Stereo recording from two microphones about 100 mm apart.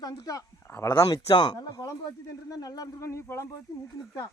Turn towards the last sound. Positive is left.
turn(degrees=30)  # may be behind; listen again after turning